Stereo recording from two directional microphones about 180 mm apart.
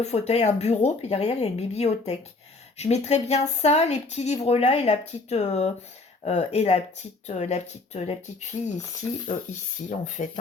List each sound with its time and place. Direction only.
0.0 s speech: 35° left (ahead or behind)
10.0 s speech: 45° left (ahead or behind)